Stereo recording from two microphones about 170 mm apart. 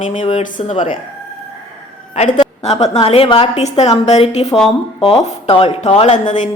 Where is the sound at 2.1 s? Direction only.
40° left (ahead or behind).